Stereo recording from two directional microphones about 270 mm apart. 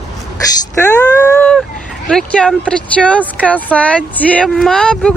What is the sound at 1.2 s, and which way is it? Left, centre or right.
Speech, centre.